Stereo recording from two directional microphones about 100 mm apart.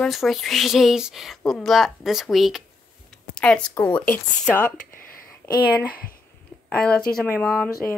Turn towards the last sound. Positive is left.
turn(degrees=15)  # may be behind; listen again after turning